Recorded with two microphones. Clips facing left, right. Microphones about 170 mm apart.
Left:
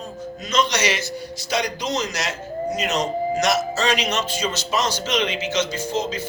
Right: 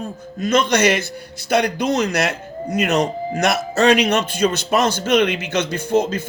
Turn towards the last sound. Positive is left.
turn(degrees=-55)  # may be behind; listen again after turning